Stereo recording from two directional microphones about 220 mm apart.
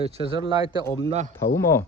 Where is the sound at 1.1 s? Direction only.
30° right (ahead or behind).